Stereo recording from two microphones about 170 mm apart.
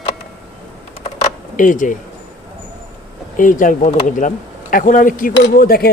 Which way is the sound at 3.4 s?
50° left (ahead or behind).